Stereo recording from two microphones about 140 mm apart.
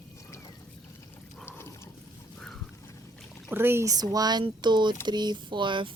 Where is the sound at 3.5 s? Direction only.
15° right (ahead or behind); by 5.9 s 35° right (ahead or behind).